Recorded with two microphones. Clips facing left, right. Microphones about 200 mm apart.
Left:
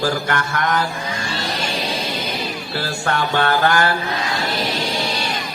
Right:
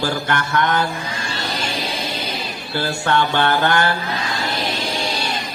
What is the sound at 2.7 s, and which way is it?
A man's voice, 25° right (ahead or behind).